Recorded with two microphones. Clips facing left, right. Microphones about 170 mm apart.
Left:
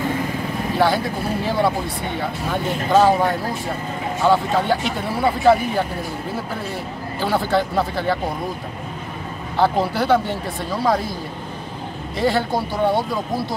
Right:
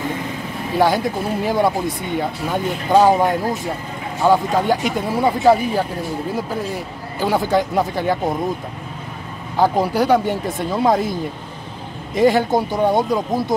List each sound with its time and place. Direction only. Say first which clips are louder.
0.7 s speech: right 3 dB; 15° right (ahead or behind)
7.2 s speech: right 2 dB; 15° right (ahead or behind)
9.6 s speech: right 2 dB; 15° right (ahead or behind)
12.2 s speech: right 5 dB; 20° right (ahead or behind)